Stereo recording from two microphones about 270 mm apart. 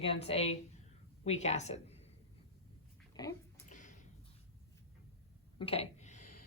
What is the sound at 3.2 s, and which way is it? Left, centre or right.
Speech, centre.